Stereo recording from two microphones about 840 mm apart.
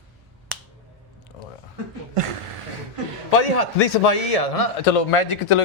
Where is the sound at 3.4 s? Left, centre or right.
Left.